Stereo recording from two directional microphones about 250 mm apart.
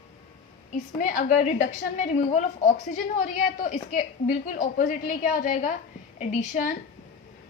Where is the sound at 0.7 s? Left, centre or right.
Left.